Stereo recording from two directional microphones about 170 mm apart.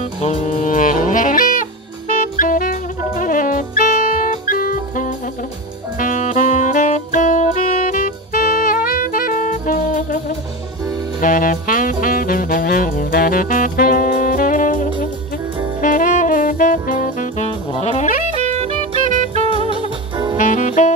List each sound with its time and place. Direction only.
0.2 s music: 50° left (ahead or behind)
5.9 s saxophone: 50° left (ahead or behind)
17.5 s saxophone: 40° left (ahead or behind)
18.4 s music: 40° right (ahead or behind)
19.5 s music: 30° right (ahead or behind)
20.3 s jazz: 45° left (ahead or behind)